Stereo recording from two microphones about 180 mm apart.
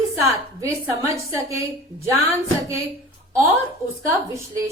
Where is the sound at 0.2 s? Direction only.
15° right (ahead or behind).